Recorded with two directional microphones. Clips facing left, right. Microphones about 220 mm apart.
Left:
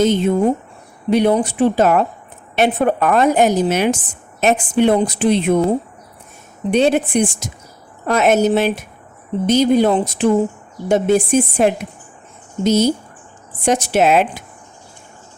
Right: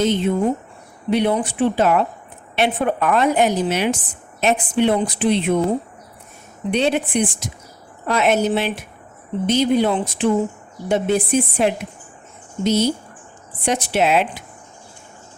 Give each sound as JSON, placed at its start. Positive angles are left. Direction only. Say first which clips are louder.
{"t": 0.0, "sound": "a woman's voice", "louder": "left 4 dB", "side_deg": 45}
{"t": 6.7, "sound": "a woman's voice", "louder": "left 4 dB", "side_deg": 45}